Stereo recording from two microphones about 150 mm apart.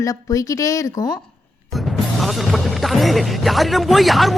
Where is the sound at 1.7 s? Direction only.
Centre (ahead or behind).